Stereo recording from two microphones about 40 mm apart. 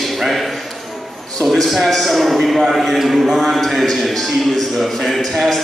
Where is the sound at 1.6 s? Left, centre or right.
Centre.